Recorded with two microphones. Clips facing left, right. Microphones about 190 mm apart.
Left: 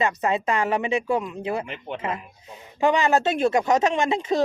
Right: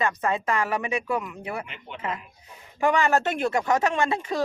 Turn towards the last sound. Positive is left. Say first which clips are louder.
# left 3 dB
turn(degrees=20)  # may be behind; listen again after turning